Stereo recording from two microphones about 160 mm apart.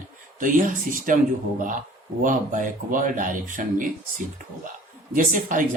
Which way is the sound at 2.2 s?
55° right (ahead or behind).